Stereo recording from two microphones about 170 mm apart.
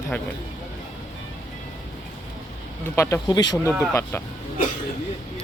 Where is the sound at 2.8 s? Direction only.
15° left (ahead or behind).